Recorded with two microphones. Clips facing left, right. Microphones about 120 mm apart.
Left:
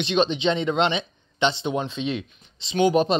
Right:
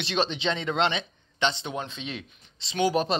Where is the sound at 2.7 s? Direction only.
Centre (ahead or behind).